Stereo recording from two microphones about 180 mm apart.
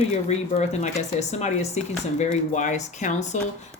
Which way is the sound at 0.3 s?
40° left (ahead or behind).